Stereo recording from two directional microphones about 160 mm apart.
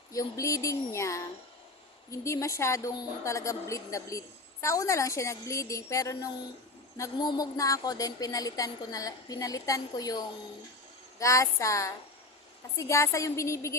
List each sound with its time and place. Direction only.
0.1 s a woman's voice: 20° left (ahead or behind)